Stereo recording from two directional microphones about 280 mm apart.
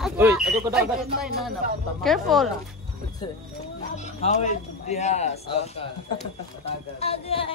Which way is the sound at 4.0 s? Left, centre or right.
Left.